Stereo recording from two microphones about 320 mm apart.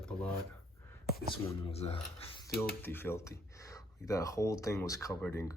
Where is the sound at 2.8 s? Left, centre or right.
Centre.